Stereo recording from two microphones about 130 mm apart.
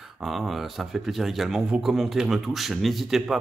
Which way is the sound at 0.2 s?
Centre (ahead or behind).